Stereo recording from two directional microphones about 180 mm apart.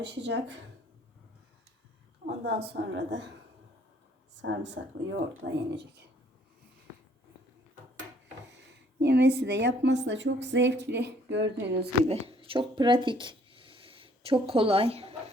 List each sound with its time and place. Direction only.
0.0 s a woman's voice: 70° right (ahead or behind)
2.2 s a sound: 65° right (ahead or behind)
4.4 s speech: 85° right
9.0 s a woman's voice: 70° right (ahead or behind)
12.0 s speech: 35° right (ahead or behind)